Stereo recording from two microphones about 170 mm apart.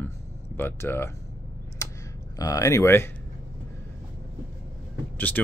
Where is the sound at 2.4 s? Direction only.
20° left (ahead or behind).